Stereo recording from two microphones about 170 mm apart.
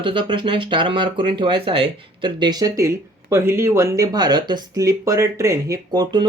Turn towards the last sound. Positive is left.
turn(degrees=-25)  # may be behind; listen again after turning